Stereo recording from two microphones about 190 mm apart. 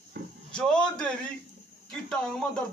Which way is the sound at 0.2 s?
50° right (ahead or behind).